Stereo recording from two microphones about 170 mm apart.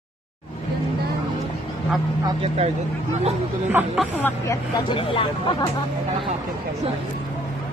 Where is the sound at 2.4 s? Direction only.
35° right (ahead or behind).